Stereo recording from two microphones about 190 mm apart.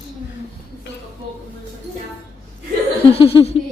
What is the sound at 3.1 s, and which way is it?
Laughter, 30° left (ahead or behind).